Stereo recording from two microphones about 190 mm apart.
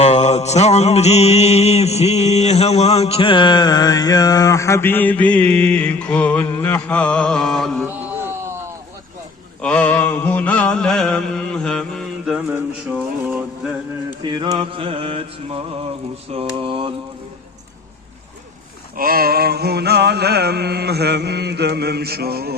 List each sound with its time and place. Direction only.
0.0 s mantra: 35° left (ahead or behind); by 7.9 s 5° left (ahead or behind)
9.6 s mantra: 5° left (ahead or behind)
14.2 s mantra: 25° right (ahead or behind)
18.9 s a sound: 50° right (ahead or behind)